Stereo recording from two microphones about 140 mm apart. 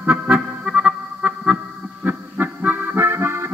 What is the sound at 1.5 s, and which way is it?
Accordion, 15° right (ahead or behind).